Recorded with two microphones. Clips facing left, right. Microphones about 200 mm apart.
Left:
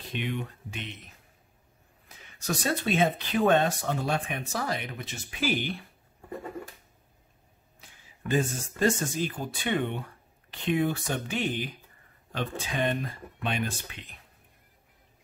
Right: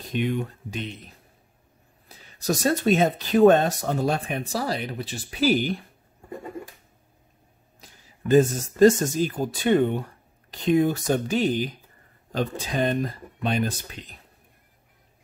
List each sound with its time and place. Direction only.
0.0 s speech: 45° right (ahead or behind)
7.8 s speech: 40° right (ahead or behind)